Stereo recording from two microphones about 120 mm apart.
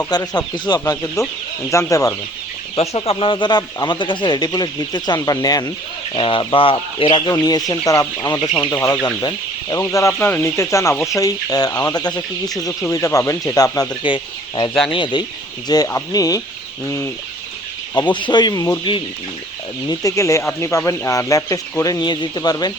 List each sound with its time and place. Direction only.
0.1 s speech: 35° left (ahead or behind)
1.7 s speech: 25° left (ahead or behind)
2.7 s speech: 60° left (ahead or behind); by 5.7 s 30° left (ahead or behind)
6.1 s speech: 45° left (ahead or behind)
8.7 s speech: 25° left (ahead or behind)
14.0 s speech: 40° left (ahead or behind); by 17.1 s 25° left (ahead or behind)
18.1 s speech: 40° left (ahead or behind)
19.9 s speech: 30° left (ahead or behind)